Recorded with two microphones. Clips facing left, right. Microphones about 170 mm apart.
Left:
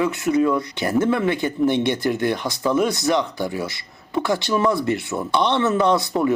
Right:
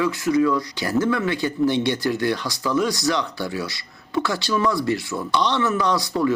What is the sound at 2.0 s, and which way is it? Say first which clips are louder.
Speech: left 1 dB; 20° left (ahead or behind).